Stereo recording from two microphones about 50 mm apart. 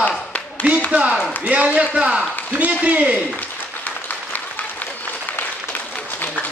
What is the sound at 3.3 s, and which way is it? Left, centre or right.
Applause, left.